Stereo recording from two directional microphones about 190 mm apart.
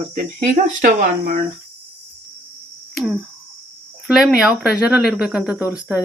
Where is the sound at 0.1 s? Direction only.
45° right (ahead or behind).